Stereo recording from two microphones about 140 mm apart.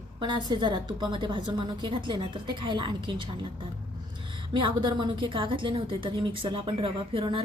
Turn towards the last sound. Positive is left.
turn(degrees=-40)  # may be behind; listen again after turning